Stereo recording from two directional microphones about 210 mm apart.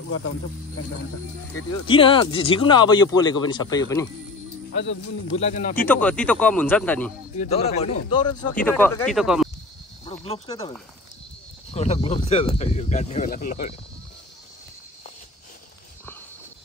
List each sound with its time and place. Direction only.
1.9 s speech: 25° left (ahead or behind)
5.4 s speech: 35° left (ahead or behind)
5.9 s speech: 5° left (ahead or behind)
7.3 s speech: 30° left (ahead or behind)
8.6 s speech: 10° left (ahead or behind)
10.0 s speech: 25° left (ahead or behind)
11.7 s speech: 30° left (ahead or behind)